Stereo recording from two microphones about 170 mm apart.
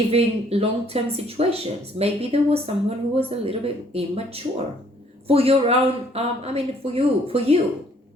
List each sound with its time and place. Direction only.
0.1 s speech: 35° right (ahead or behind)